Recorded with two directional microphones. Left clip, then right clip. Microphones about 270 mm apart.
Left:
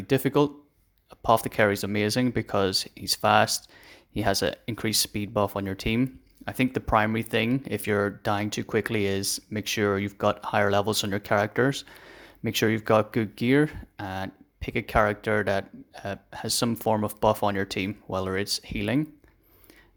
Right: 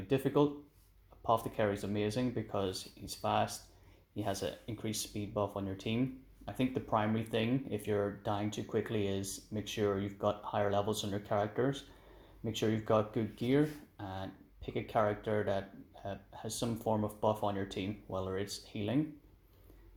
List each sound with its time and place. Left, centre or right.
0.1 s speech: left